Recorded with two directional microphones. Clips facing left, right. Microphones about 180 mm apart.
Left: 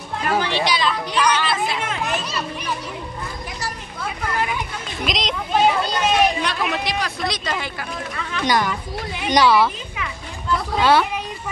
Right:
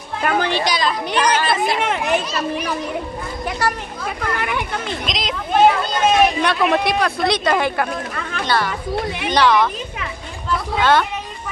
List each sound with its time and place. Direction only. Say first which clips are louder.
0.4 s chatter: right 1 dB; 45° right (ahead or behind)
1.8 s chatter: right 6 dB; 60° right (ahead or behind)
3.4 s speech: right 9 dB; 65° right (ahead or behind)
5.0 s speech: left 1 dB; centre (ahead or behind)
5.6 s speech: right 4 dB; 50° right (ahead or behind)
8.5 s a woman's voice: even; 15° left (ahead or behind)
10.8 s a woman's voice: even; 10° left (ahead or behind)